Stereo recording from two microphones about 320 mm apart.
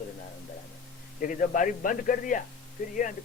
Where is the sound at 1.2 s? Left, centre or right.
Left.